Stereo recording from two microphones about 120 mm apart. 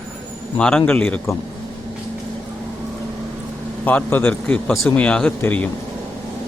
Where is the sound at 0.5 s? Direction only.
10° left (ahead or behind).